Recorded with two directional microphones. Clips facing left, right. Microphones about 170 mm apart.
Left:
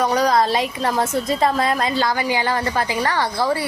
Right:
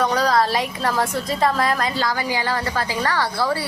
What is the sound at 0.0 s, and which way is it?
A woman's voice, 20° left (ahead or behind).